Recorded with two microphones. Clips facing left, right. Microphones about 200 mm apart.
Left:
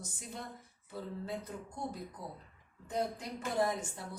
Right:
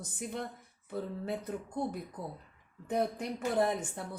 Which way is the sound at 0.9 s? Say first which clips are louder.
Right 4 dB; 60° right (ahead or behind).